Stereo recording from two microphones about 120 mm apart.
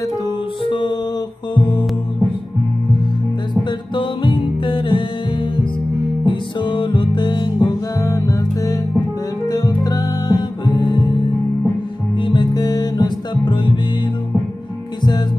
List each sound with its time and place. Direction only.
0.7 s music: 40° left (ahead or behind)
3.9 s music: 45° left (ahead or behind)
6.2 s music: 40° left (ahead or behind)
8.0 s music: 25° left (ahead or behind)
12.2 s music: 40° left (ahead or behind)